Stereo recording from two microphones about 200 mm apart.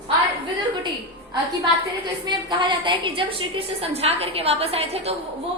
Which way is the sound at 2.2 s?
25° right (ahead or behind).